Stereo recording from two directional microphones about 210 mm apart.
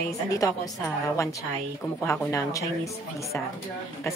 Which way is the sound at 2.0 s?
15° left (ahead or behind).